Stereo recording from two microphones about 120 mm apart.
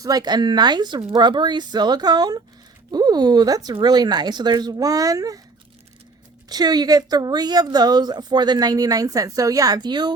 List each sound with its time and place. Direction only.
0.0 s speech: 35° right (ahead or behind)
6.5 s speech: 35° right (ahead or behind)